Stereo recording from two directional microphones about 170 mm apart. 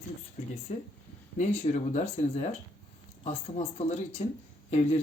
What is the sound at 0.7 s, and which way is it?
A man's voice, 45° left (ahead or behind).